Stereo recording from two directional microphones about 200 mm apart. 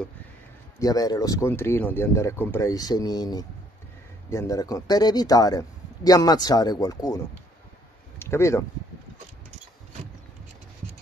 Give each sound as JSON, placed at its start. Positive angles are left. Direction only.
{"t": 0.7, "sound": "a man's voice", "side_deg": 20}
{"t": 8.2, "sound": "speech", "side_deg": 15}